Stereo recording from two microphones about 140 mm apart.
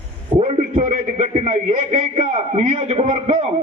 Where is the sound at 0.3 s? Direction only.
50° right (ahead or behind).